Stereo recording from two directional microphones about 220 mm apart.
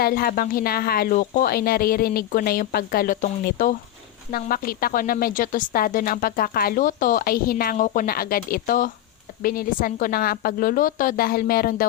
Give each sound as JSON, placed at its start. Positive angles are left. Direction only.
{"t": 0.0, "sound": "speech", "side_deg": 45}